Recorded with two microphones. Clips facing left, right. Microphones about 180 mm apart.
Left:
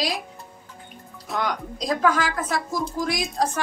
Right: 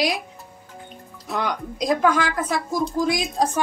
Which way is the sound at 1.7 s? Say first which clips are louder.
Right 3 dB; 15° right (ahead or behind).